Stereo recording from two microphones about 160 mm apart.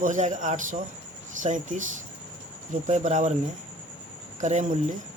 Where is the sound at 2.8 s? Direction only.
50° right (ahead or behind).